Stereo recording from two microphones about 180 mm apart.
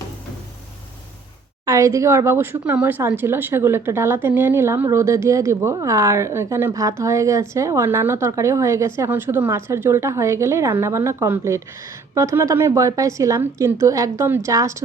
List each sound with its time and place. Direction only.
1.6 s speech: 15° right (ahead or behind)